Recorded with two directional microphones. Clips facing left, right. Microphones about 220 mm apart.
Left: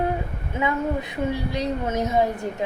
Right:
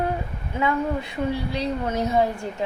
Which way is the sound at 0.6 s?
20° left (ahead or behind).